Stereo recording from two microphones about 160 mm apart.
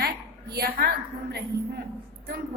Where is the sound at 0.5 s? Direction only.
80° right.